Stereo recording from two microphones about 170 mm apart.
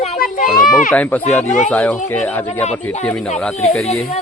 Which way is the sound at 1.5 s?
45° left (ahead or behind).